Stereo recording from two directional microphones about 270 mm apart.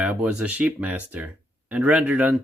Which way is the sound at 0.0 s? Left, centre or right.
Centre.